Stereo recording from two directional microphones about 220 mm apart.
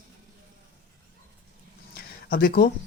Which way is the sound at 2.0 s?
45° left (ahead or behind).